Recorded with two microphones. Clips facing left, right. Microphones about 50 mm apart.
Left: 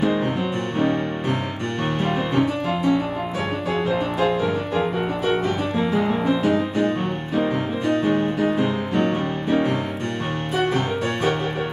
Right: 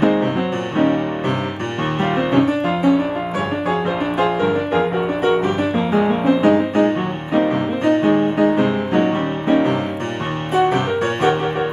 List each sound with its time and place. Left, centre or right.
0.0 s music: right
2.0 s music: right
4.2 s music: right
6.4 s music: right